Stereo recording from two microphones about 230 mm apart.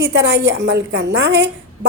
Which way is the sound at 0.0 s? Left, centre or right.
Right.